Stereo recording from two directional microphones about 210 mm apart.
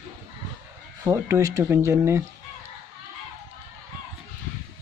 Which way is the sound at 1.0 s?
15° right (ahead or behind).